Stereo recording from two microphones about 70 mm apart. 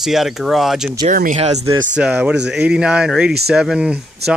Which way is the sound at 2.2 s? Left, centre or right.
Centre.